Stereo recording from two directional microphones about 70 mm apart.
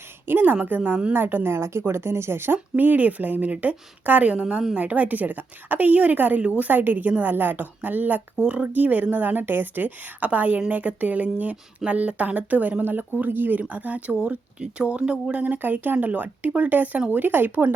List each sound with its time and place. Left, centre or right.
0.3 s a woman's voice: right